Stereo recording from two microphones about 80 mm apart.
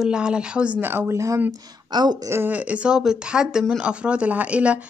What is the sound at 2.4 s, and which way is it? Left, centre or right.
Speech, centre.